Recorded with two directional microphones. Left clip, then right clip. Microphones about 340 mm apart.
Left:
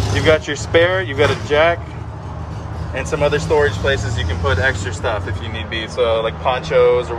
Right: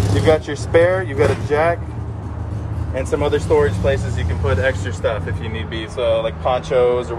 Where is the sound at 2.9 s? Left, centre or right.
Centre.